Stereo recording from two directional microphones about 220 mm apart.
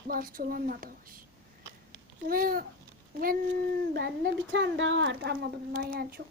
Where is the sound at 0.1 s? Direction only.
40° right (ahead or behind).